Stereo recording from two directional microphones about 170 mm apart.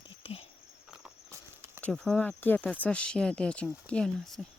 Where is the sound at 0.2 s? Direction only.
35° left (ahead or behind).